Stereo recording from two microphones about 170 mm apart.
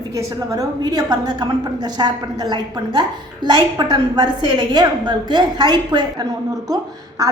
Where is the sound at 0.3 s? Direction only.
20° right (ahead or behind).